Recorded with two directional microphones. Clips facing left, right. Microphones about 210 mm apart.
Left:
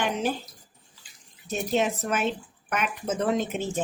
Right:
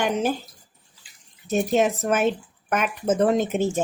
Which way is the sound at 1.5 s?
50° right (ahead or behind).